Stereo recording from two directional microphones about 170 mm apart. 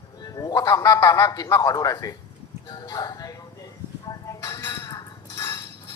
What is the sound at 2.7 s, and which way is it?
Music, 25° left (ahead or behind).